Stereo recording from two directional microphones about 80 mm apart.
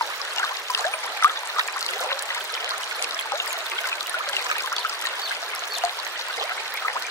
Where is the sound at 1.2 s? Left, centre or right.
Left.